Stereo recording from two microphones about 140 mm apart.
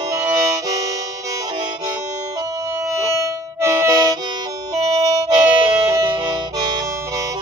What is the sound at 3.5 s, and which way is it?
Music, 20° right (ahead or behind).